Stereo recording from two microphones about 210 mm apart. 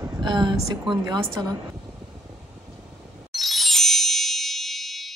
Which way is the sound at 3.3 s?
Centre (ahead or behind).